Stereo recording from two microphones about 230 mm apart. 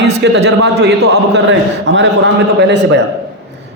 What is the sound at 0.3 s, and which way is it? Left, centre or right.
Speech, right.